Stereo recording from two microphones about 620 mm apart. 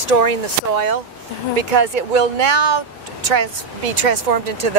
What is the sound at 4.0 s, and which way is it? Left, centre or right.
Speech, right.